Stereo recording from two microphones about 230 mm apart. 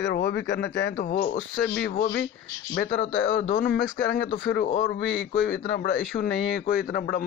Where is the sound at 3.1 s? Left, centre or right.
Left.